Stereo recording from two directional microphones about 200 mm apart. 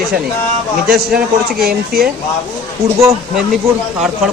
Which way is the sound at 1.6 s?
50° right (ahead or behind).